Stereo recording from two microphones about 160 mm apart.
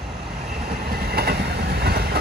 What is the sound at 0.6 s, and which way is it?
Train, 70° right (ahead or behind).